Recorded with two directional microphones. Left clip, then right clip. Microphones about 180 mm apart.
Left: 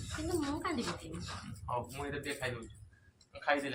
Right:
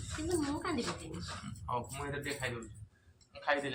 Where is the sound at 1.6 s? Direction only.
15° left (ahead or behind).